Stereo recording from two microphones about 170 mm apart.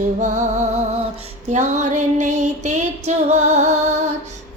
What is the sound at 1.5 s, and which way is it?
Female singing, 45° right (ahead or behind).